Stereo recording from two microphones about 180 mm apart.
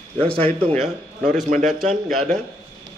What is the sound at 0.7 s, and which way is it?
Speech, centre (ahead or behind).